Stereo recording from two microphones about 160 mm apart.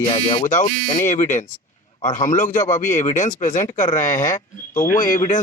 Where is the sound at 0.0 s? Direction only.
45° left (ahead or behind).